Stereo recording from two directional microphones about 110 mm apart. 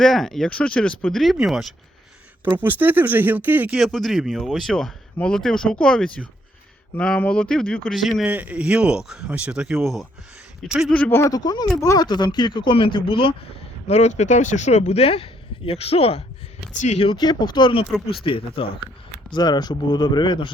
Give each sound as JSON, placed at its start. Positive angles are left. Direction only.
{"t": 0.0, "sound": "speech", "side_deg": 0}
{"t": 2.4, "sound": "speech", "side_deg": -15}
{"t": 3.8, "sound": "speech", "side_deg": 0}
{"t": 7.9, "sound": "speech", "side_deg": 0}
{"t": 8.3, "sound": "speech", "side_deg": -15}
{"t": 10.8, "sound": "speech", "side_deg": 10}
{"t": 11.1, "sound": "speech", "side_deg": 25}
{"t": 11.3, "sound": "speech", "side_deg": 40}
{"t": 11.8, "sound": "speech", "side_deg": 30}
{"t": 12.0, "sound": "speech", "side_deg": 40}
{"t": 13.8, "sound": "speech", "side_deg": 90}
{"t": 16.8, "sound": "speech", "side_deg": 80}
{"t": 17.1, "sound": "speech", "side_deg": 45}
{"t": 19.3, "sound": "speech", "side_deg": 40}